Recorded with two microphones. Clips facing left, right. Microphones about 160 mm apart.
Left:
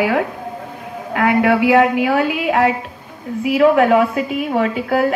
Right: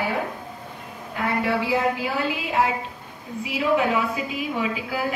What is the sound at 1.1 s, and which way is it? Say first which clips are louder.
A woman's voice: left 9 dB; 80° left.